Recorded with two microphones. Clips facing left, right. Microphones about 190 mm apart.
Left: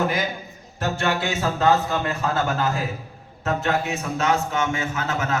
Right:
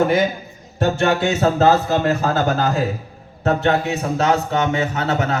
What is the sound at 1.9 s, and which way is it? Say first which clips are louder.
A man's voice: right 6 dB; 35° right (ahead or behind).